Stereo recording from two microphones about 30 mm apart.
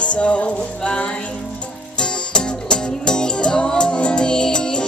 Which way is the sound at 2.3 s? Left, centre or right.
Left.